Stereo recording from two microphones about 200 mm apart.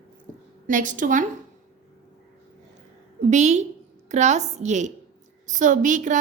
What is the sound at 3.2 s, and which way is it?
A woman's voice, 35° right (ahead or behind).